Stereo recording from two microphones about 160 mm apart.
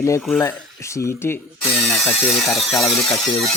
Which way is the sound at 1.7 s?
Centre (ahead or behind).